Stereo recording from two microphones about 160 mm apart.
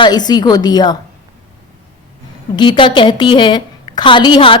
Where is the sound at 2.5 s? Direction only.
30° left (ahead or behind).